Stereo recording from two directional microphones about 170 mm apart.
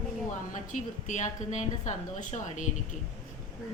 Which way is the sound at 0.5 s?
45° left (ahead or behind).